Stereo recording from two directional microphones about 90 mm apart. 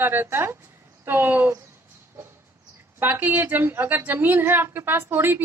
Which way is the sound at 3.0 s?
20° right (ahead or behind).